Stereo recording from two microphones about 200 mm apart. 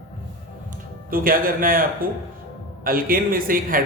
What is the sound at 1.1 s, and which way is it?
A man's voice, 45° right (ahead or behind).